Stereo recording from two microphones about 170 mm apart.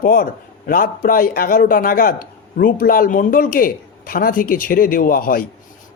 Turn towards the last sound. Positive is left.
turn(degrees=60)  # may be behind; listen again after turning